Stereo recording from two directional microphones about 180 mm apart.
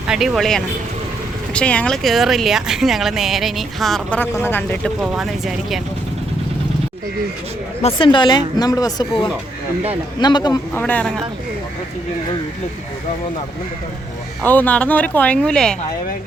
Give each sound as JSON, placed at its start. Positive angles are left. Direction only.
{"t": 0.1, "sound": "speech", "side_deg": 0}
{"t": 7.8, "sound": "a woman's voice", "side_deg": 30}
{"t": 10.8, "sound": "speech", "side_deg": 10}
{"t": 14.4, "sound": "speech", "side_deg": 10}